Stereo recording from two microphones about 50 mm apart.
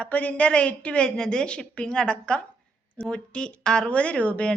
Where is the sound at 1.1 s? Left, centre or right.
Centre.